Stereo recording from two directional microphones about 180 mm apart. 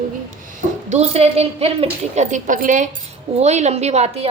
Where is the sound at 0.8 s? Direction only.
35° right (ahead or behind).